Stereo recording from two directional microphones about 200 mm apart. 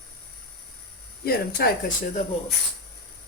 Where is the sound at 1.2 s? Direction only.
50° left (ahead or behind).